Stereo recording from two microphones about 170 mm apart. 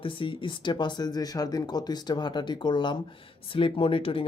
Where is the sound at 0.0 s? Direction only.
30° left (ahead or behind).